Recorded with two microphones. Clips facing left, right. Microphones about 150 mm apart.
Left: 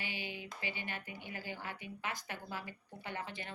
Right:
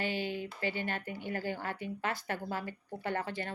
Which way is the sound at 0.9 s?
50° right (ahead or behind).